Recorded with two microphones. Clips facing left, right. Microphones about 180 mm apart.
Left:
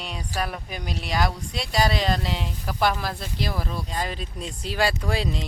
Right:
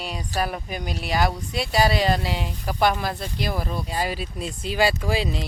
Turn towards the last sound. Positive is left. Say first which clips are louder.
# right 2 dB
turn(degrees=-5)  # may be behind; listen again after turning